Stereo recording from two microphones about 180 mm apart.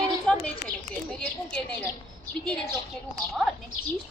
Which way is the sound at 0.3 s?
5° left (ahead or behind).